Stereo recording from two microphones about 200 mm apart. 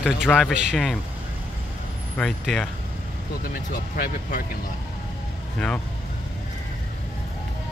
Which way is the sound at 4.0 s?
50° left (ahead or behind).